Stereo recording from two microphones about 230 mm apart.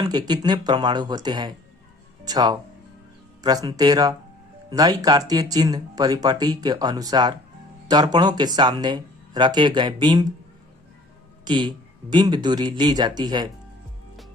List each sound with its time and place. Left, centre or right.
0.0 s speech: centre
11.4 s speech: centre